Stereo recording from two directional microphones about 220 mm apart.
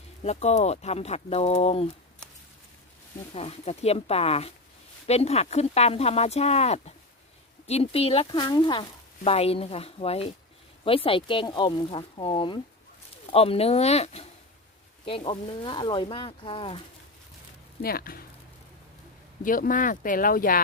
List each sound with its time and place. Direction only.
0.2 s speech: 30° left (ahead or behind)
3.3 s speech: 30° left (ahead or behind)
17.8 s speech: 40° left (ahead or behind)
19.5 s speech: 40° left (ahead or behind)